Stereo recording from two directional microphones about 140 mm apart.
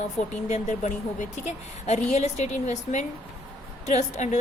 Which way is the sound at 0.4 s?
60° left (ahead or behind).